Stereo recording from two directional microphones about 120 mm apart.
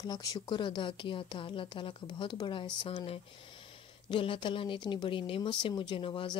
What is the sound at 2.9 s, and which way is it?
Speech, 55° left (ahead or behind).